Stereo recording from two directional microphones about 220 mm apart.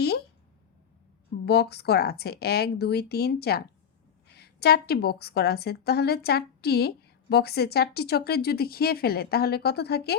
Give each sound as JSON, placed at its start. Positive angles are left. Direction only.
{"t": 1.5, "sound": "a woman's voice", "side_deg": 50}